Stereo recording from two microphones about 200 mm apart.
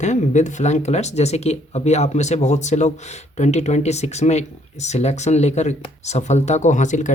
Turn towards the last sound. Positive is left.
turn(degrees=40)  # may be behind; listen again after turning